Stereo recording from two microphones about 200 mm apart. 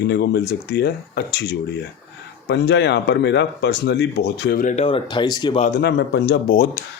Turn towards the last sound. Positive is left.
turn(degrees=40)  # may be behind; listen again after turning